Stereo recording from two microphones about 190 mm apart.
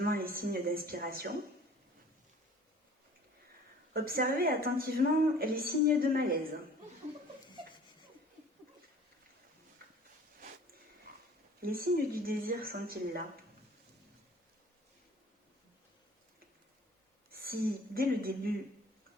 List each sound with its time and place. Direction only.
0.0 s a woman's voice: 50° right (ahead or behind)
3.9 s a woman's voice: 50° right (ahead or behind)
11.6 s a woman's voice: 50° right (ahead or behind)
17.4 s a woman's voice: 50° right (ahead or behind)